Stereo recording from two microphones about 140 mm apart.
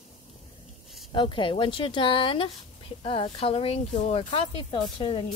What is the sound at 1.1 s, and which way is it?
Speech, 35° left (ahead or behind).